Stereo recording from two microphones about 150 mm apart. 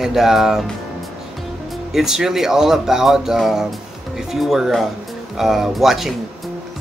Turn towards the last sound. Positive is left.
turn(degrees=0)  # may be behind; listen again after turning